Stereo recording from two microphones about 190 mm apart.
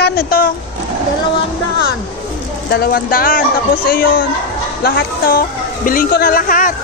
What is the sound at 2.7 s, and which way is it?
A woman's voice, 55° left (ahead or behind).